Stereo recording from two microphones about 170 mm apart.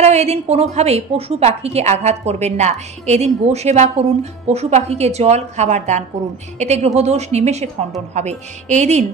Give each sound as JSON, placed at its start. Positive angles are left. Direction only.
{"t": 0.0, "sound": "a woman's voice", "side_deg": -40}